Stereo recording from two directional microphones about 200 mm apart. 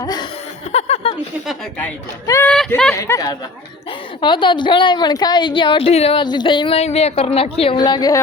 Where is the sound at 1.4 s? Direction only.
Centre (ahead or behind).